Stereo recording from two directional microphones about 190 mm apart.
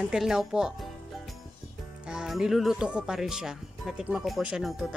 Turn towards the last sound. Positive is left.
turn(degrees=0)  # may be behind; listen again after turning